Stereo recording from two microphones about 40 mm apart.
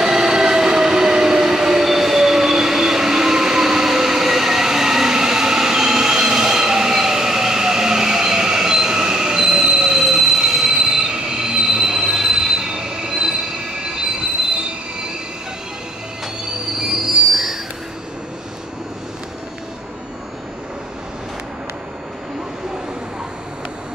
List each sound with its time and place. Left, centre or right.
0.0 s train: centre
11.4 s train wheels squealing: centre
16.8 s train wheels squealing: centre